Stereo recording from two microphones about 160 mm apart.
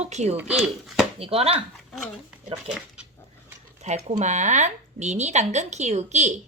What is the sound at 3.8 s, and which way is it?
A woman's voice, 45° right (ahead or behind).